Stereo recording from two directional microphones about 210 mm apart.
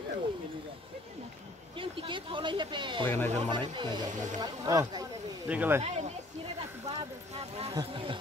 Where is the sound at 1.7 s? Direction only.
25° right (ahead or behind).